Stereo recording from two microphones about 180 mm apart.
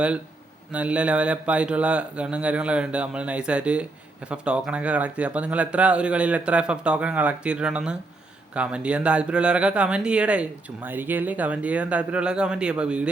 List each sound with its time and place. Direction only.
0.7 s speech: 5° right (ahead or behind)